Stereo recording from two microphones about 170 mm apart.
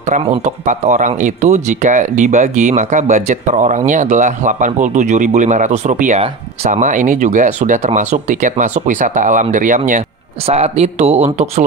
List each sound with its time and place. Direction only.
0.1 s speech: 45° right (ahead or behind)